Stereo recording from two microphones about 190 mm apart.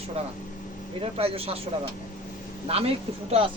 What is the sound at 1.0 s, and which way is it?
Speech, 30° right (ahead or behind).